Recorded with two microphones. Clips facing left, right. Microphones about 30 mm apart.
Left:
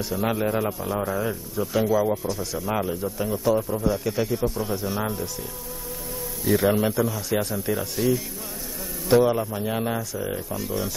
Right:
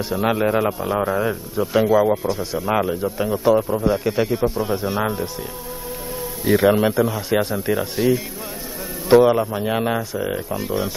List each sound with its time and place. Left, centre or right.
0.1 s a man's voice: right
6.4 s a man's voice: right